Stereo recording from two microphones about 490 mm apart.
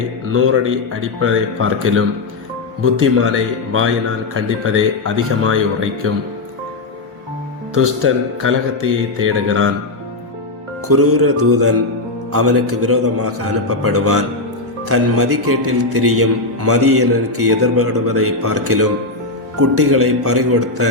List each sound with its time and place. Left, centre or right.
0.3 s speech: right
3.7 s speech: right
7.8 s speech: right
10.8 s speech: right